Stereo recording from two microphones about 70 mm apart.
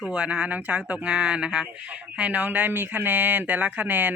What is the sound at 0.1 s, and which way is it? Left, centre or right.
Speech, centre.